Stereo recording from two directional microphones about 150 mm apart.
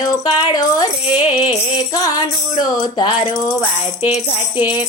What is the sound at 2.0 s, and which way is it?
Music, 25° left (ahead or behind).